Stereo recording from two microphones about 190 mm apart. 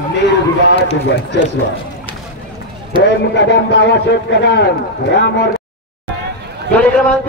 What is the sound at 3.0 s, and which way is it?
A man's voice, 65° left (ahead or behind).